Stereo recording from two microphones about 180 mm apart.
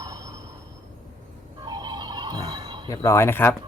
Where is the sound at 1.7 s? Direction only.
25° right (ahead or behind).